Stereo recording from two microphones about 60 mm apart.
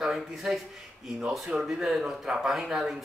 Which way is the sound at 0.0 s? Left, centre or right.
Centre.